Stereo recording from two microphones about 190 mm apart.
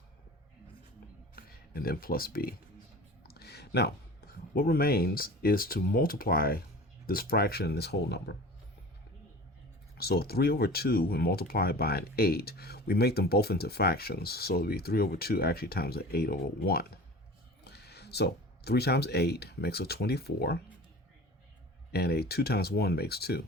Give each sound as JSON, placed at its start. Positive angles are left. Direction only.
{"t": 1.4, "sound": "speech", "side_deg": 50}
{"t": 3.2, "sound": "a sound", "side_deg": 55}
{"t": 4.5, "sound": "speech", "side_deg": 50}
{"t": 10.0, "sound": "speech", "side_deg": 55}
{"t": 21.9, "sound": "speech", "side_deg": 55}